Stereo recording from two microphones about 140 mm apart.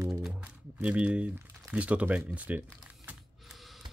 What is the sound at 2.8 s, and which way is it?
Typing, 10° right (ahead or behind).